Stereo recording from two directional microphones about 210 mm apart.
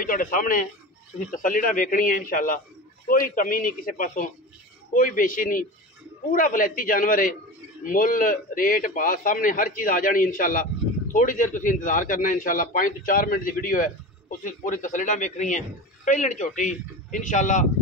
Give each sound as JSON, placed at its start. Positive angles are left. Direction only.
{"t": 0.0, "sound": "a man's voice", "side_deg": 40}